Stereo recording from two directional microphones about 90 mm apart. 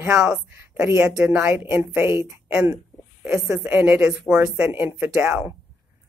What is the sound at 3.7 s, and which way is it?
Speech, 25° right (ahead or behind).